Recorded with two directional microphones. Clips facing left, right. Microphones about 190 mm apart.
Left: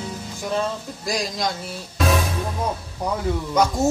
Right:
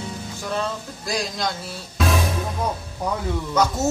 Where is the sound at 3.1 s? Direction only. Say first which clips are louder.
Left 2 dB; 10° left (ahead or behind).